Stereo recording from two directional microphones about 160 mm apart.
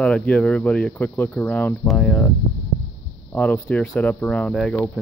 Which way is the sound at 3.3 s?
10° left (ahead or behind).